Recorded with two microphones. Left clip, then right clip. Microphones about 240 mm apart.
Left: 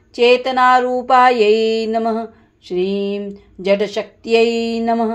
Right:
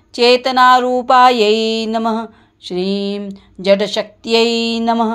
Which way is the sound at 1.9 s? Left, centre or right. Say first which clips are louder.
Even; right.